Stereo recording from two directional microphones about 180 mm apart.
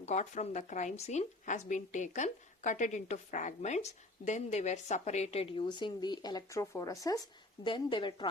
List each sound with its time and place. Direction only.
0.0 s a woman's voice: 40° left (ahead or behind)